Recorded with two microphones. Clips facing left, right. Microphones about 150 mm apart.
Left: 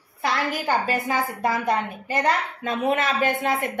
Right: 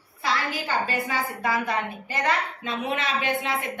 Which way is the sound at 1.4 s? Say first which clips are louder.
Left 3 dB; 45° left (ahead or behind).